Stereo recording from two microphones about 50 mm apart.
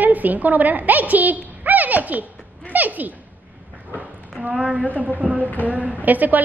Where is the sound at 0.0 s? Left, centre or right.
Right.